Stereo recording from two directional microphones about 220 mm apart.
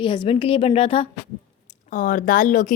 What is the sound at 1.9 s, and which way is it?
Speech, 35° left (ahead or behind).